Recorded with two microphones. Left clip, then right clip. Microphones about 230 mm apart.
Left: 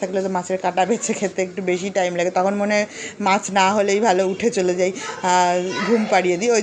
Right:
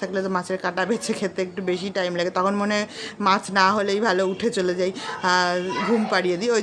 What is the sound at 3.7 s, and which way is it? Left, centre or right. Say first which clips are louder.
Speech: left 3 dB; right.